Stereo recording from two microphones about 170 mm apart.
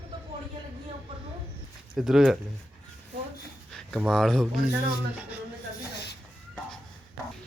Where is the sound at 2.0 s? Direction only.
5° right (ahead or behind).